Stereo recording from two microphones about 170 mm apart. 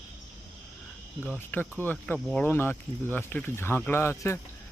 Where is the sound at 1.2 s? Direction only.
10° left (ahead or behind).